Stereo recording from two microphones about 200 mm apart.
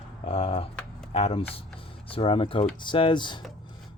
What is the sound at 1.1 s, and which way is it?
Speech, 30° left (ahead or behind).